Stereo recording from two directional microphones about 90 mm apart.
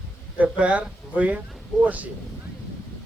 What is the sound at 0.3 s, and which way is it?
Speech, 15° right (ahead or behind).